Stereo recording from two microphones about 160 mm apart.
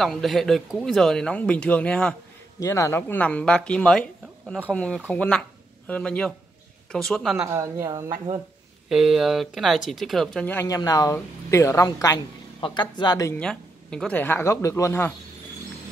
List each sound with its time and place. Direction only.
0.0 s speech: centre (ahead or behind)
2.6 s speech: 20° left (ahead or behind); by 7.4 s centre (ahead or behind)
7.4 s a woman's voice: 20° right (ahead or behind)
8.8 s a man's voice: centre (ahead or behind); by 13.3 s 25° left (ahead or behind)
13.4 s speech: 5° left (ahead or behind)